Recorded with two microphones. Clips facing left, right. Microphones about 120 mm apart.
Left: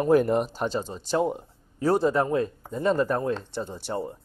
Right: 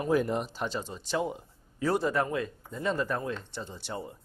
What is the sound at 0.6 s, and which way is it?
Speech, 35° left (ahead or behind).